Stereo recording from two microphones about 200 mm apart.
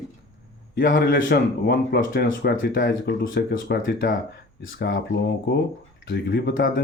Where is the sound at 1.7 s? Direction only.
65° left (ahead or behind).